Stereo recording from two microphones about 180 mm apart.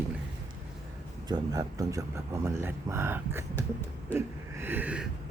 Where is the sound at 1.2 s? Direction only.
20° right (ahead or behind).